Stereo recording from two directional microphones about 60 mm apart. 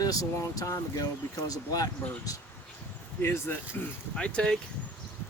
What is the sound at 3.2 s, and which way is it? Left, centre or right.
Speech, left.